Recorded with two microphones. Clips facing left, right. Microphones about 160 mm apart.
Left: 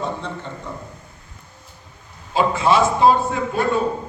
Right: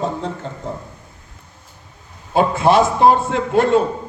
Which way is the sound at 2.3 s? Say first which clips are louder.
Right 3 dB; 55° right (ahead or behind).